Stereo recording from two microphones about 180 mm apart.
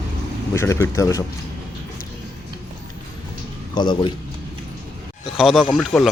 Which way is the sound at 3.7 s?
25° left (ahead or behind).